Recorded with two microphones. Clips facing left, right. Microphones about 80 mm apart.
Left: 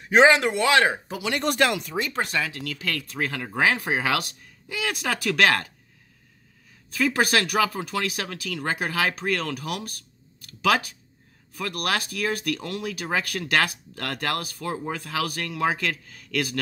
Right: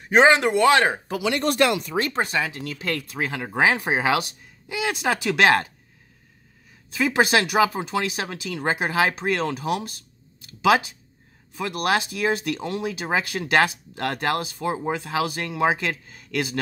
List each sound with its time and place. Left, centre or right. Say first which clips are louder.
0.1 s speech: right 1 dB; right
2.1 s speech: right 2 dB; right
3.1 s speech: right 1 dB; centre
6.9 s speech: right 2 dB; centre